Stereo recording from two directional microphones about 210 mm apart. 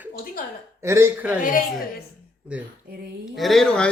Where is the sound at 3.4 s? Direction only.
Centre (ahead or behind).